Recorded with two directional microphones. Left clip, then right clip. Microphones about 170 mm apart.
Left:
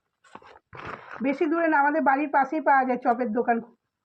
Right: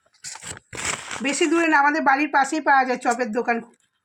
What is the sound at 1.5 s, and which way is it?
Speech, 55° right (ahead or behind).